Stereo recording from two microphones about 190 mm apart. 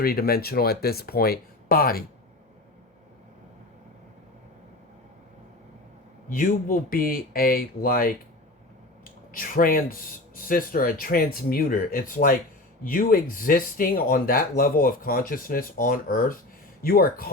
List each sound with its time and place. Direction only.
0.0 s speech: 50° left (ahead or behind)
6.2 s speech: 45° left (ahead or behind)
9.0 s a sound: 45° left (ahead or behind)
10.3 s speech: 45° left (ahead or behind)